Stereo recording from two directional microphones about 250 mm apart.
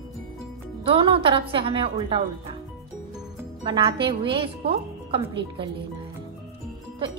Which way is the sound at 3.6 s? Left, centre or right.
Centre.